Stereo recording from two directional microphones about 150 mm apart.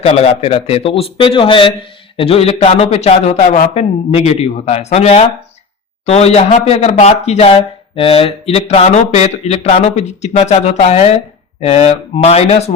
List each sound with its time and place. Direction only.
0.0 s a man's voice: 45° left (ahead or behind)